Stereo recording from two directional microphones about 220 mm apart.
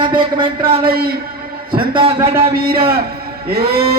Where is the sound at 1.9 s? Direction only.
25° right (ahead or behind).